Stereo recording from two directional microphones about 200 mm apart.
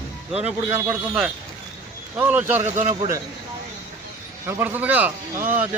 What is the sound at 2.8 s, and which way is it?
Speech, 40° right (ahead or behind).